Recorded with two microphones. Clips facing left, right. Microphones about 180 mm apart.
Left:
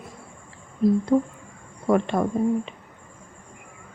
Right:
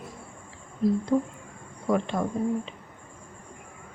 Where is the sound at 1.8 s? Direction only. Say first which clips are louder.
Left 5 dB; 60° left (ahead or behind).